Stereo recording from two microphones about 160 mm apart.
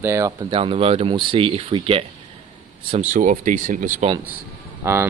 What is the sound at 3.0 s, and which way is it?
Speech, 55° right (ahead or behind).